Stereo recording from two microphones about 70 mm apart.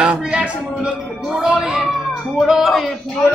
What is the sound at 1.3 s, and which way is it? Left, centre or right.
Music, centre.